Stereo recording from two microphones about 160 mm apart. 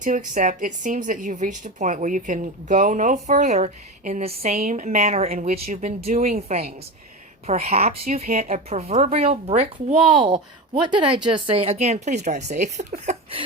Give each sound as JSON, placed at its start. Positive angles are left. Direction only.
{"t": 0.0, "sound": "a woman's voice", "side_deg": -55}
{"t": 4.4, "sound": "a woman's voice", "side_deg": -55}